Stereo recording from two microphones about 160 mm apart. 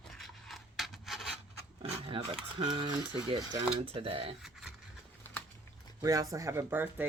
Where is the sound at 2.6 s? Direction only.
30° right (ahead or behind).